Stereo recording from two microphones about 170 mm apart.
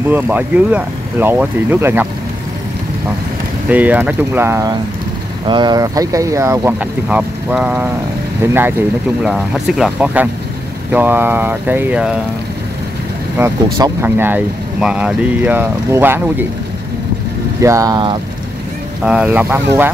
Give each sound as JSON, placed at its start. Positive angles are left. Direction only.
{"t": 0.1, "sound": "speech", "side_deg": -10}
{"t": 3.6, "sound": "speech", "side_deg": -10}
{"t": 13.4, "sound": "speech", "side_deg": -15}
{"t": 17.6, "sound": "speech", "side_deg": -20}
{"t": 19.0, "sound": "speech", "side_deg": -5}